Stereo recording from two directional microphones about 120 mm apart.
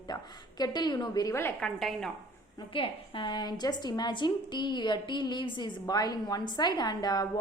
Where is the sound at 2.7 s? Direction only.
45° left (ahead or behind).